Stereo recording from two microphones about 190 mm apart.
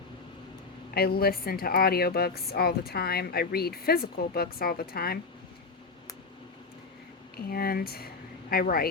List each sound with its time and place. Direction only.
0.9 s a woman's voice: 55° left (ahead or behind)
7.3 s speech: 55° left (ahead or behind)